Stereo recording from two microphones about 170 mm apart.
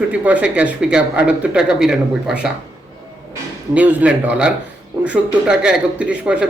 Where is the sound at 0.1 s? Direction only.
10° right (ahead or behind).